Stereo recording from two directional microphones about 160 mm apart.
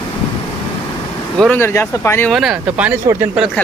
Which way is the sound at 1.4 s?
10° left (ahead or behind).